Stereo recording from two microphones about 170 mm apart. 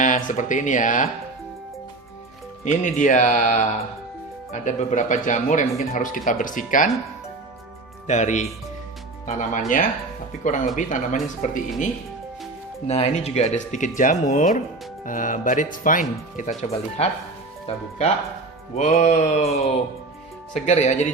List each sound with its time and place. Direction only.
0.0 s speech: 45° left (ahead or behind)
2.6 s speech: 50° left (ahead or behind)
8.0 s speech: 45° left (ahead or behind)
12.9 s speech: 40° left (ahead or behind)
17.7 s mantra: 40° left (ahead or behind)